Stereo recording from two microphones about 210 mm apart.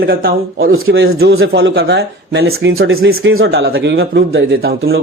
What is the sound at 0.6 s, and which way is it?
Speech, 75° right (ahead or behind).